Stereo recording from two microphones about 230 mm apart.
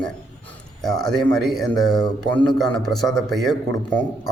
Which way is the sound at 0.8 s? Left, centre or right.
Centre.